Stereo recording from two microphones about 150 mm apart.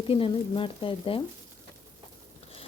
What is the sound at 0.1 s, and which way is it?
Speech, 35° left (ahead or behind).